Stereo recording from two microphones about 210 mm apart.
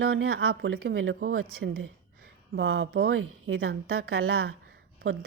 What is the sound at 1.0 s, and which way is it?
Speech, 70° right (ahead or behind).